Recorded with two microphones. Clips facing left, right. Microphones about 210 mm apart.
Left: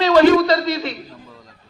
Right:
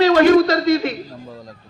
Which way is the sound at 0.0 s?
50° right (ahead or behind).